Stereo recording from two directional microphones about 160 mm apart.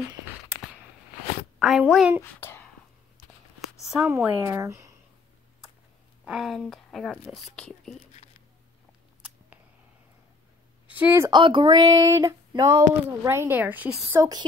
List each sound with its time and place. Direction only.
1.6 s a woman's voice: centre (ahead or behind)
4.1 s speech: 15° right (ahead or behind)
6.2 s a woman's voice: centre (ahead or behind)
10.9 s a woman's voice: 10° right (ahead or behind)
11.2 s speech: 30° right (ahead or behind)